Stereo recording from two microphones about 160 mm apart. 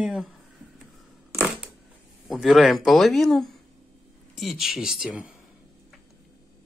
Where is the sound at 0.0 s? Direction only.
Centre (ahead or behind).